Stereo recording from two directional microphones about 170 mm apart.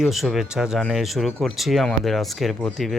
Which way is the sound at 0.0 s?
Centre (ahead or behind).